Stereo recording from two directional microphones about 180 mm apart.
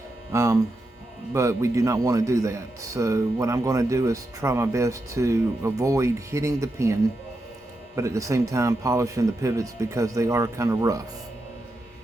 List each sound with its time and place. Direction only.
0.3 s a man's voice: 20° right (ahead or behind)